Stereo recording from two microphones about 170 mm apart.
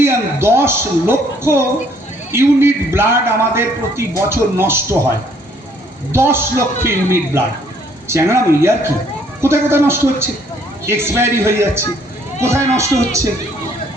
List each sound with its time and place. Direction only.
0.0 s a sound: 15° right (ahead or behind)
2.3 s a man's voice: 15° right (ahead or behind)
6.1 s a man's voice: 15° right (ahead or behind)